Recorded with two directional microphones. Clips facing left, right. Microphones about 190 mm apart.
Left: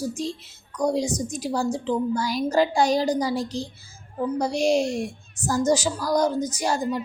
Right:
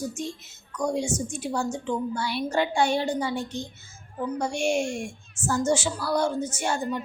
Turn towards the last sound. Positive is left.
turn(degrees=35)  # may be behind; listen again after turning